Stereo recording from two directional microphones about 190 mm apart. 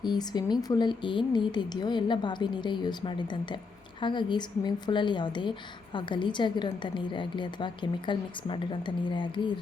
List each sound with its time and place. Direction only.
0.0 s a woman's voice: 20° left (ahead or behind)